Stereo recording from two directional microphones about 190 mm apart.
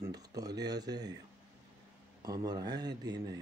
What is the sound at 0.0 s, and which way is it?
Speech, 20° right (ahead or behind).